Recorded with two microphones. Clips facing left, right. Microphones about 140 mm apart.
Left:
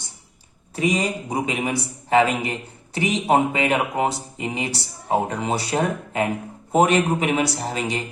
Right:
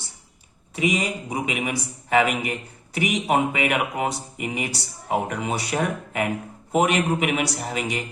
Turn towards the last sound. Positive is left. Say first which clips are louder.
# left 2 dB
turn(degrees=30)  # may be behind; listen again after turning